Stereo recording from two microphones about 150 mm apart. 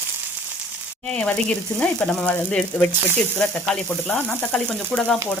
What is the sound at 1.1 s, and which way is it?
Speech, 5° left (ahead or behind).